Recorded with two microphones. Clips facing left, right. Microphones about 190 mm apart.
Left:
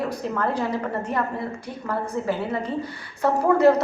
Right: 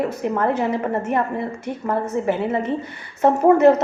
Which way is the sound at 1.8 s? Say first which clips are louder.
Right 4 dB; 20° right (ahead or behind).